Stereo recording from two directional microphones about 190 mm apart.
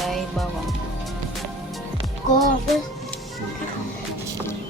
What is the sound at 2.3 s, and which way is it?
Speech, 40° left (ahead or behind).